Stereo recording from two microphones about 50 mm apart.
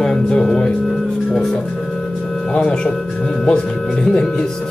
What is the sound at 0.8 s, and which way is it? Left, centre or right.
Music, centre.